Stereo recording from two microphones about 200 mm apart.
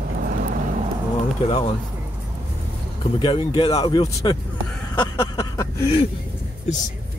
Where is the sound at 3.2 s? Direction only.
25° left (ahead or behind).